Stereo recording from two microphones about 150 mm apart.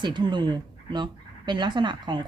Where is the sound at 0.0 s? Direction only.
30° right (ahead or behind).